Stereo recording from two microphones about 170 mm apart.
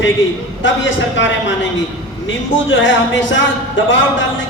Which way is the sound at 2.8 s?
90° left.